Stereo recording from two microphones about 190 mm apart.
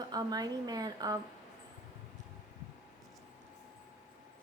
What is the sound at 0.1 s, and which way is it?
A woman's voice, 20° right (ahead or behind).